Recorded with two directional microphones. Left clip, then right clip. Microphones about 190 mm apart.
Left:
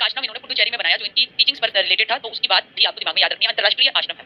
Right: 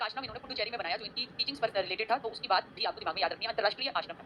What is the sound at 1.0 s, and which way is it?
Speech, 45° left (ahead or behind).